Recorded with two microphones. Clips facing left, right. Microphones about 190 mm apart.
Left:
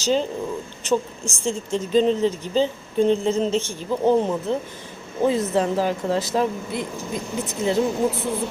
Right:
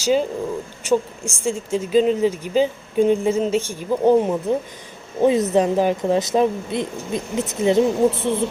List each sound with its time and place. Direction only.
0.0 s speech: 10° right (ahead or behind)